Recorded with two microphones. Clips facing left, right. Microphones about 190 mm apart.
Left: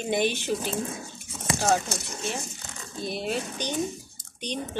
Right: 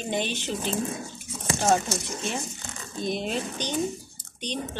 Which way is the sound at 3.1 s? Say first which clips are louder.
Right 1 dB; 5° left (ahead or behind).